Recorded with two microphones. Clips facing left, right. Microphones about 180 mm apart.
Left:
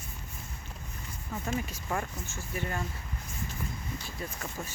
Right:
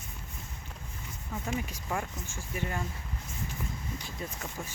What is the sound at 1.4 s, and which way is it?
Speech, 15° right (ahead or behind).